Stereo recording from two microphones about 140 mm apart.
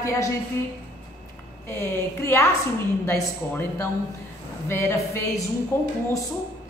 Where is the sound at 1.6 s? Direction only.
15° left (ahead or behind).